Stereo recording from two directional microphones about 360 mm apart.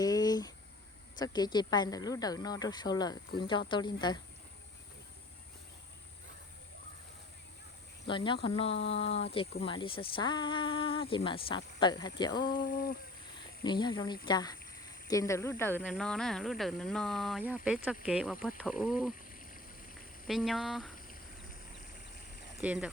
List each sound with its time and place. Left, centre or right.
0.0 s a sound: centre
1.2 s speech: centre
8.0 s speech: centre
12.6 s a sound: left
13.7 s speech: centre
20.2 s speech: centre
22.6 s speech: centre